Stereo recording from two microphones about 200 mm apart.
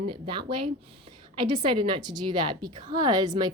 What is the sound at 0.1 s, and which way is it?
A woman's voice, 25° right (ahead or behind).